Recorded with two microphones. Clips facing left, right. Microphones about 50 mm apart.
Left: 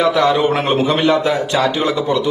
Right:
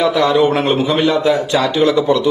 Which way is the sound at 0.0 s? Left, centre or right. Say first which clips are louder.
Right 1 dB; left.